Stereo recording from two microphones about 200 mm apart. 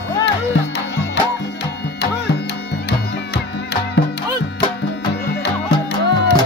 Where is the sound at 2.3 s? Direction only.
60° left (ahead or behind).